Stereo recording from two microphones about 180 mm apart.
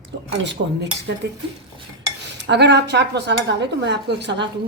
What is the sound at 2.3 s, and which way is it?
Speech, 75° right (ahead or behind).